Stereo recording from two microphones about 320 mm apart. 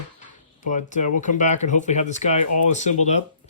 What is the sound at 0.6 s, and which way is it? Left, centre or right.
Speech, left.